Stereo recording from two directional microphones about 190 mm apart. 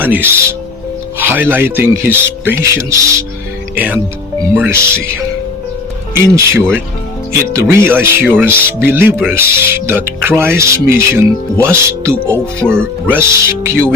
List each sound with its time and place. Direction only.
0.0 s speech: 10° right (ahead or behind)
6.2 s speech: 15° right (ahead or behind)